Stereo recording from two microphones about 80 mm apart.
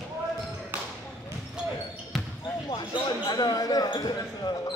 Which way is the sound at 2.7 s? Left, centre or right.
Left.